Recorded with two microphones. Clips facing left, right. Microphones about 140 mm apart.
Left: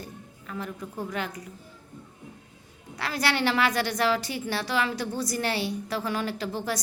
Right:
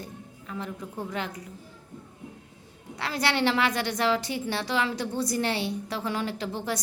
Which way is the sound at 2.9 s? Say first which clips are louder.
Even; 25° right (ahead or behind).